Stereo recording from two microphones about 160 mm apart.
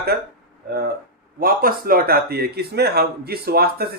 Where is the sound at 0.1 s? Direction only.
90° right.